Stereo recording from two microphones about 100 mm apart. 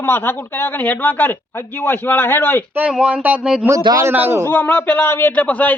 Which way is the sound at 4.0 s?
20° right (ahead or behind).